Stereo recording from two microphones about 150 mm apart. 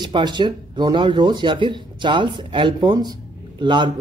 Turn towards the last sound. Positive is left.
turn(degrees=-30)  # may be behind; listen again after turning